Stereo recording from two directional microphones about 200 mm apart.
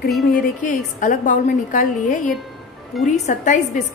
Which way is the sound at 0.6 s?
40° left (ahead or behind).